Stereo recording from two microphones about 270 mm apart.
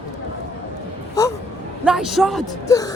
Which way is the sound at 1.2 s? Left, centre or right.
Centre.